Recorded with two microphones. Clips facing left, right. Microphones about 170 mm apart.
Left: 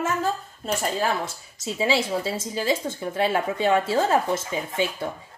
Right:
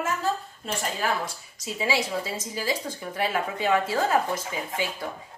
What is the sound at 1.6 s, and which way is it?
Speech, 25° left (ahead or behind).